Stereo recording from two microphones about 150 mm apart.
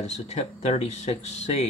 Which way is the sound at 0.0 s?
45° left (ahead or behind).